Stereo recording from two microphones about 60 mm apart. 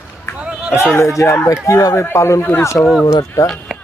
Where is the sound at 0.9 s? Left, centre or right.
Left.